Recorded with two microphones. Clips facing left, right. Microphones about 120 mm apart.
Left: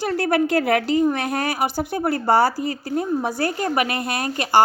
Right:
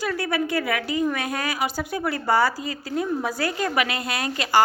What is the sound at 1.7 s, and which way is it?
Speech, 35° left (ahead or behind).